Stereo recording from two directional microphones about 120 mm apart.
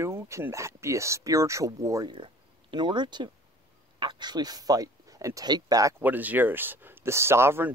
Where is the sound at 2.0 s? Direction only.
45° right (ahead or behind); by 6.0 s 30° right (ahead or behind).